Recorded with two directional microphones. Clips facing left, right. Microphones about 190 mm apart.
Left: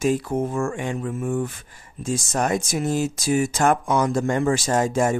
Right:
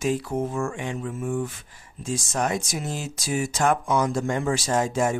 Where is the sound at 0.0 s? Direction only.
50° left (ahead or behind).